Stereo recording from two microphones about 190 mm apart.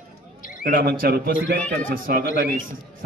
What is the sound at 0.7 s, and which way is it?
A man's voice, 50° right (ahead or behind).